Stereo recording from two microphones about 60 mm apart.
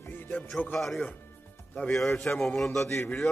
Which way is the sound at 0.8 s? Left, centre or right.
Centre.